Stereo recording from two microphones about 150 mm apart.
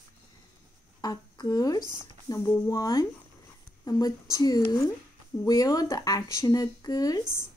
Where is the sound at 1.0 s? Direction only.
25° left (ahead or behind).